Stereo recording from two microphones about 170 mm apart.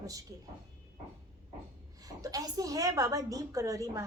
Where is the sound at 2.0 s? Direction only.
20° right (ahead or behind).